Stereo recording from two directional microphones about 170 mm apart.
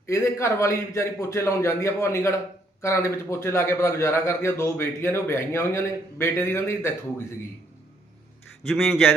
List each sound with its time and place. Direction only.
0.0 s a man's voice: 15° left (ahead or behind)
8.7 s a man's voice: centre (ahead or behind)